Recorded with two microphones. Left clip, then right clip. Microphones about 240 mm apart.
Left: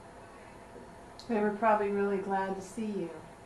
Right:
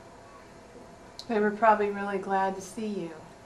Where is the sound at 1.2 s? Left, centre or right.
Centre.